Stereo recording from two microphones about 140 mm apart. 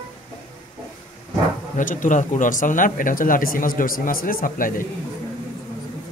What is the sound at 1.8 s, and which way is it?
Speech, 65° left (ahead or behind).